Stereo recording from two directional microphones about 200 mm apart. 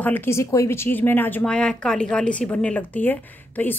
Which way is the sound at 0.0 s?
10° left (ahead or behind).